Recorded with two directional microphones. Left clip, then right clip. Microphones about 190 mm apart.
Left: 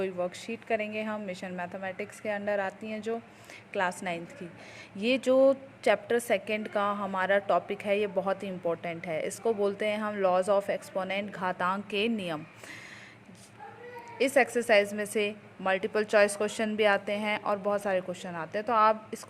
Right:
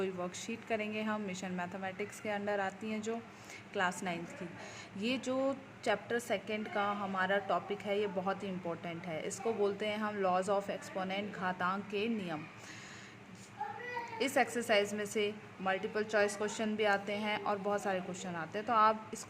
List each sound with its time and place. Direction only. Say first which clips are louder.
0.0 s a woman's voice: left 6 dB; 20° left (ahead or behind); by 12.4 s 40° left (ahead or behind)
14.2 s a woman's voice: left 8 dB; 25° left (ahead or behind)